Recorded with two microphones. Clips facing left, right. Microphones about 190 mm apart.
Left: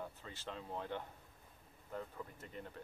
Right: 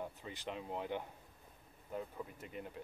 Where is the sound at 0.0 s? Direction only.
15° right (ahead or behind).